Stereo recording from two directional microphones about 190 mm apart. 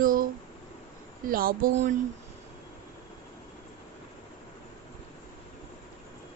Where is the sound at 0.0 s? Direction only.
45° right (ahead or behind).